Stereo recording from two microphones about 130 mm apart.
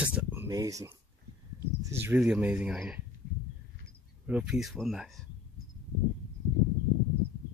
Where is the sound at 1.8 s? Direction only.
20° right (ahead or behind).